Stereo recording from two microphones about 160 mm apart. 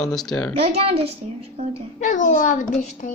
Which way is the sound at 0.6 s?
40° right (ahead or behind).